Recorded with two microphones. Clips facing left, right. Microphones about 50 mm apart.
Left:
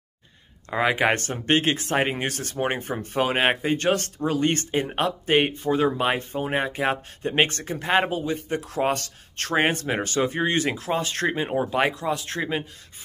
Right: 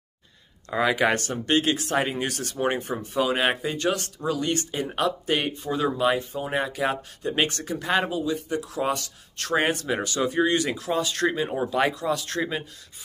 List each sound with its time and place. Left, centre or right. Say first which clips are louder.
0.7 s speech: left 1 dB; left